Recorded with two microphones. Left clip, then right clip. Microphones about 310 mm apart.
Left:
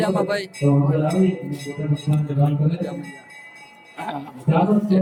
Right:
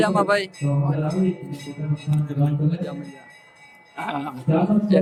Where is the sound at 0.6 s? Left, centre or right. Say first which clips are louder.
Left 8 dB; left.